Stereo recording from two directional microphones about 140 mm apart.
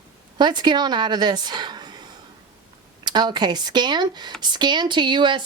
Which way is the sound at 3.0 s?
30° right (ahead or behind).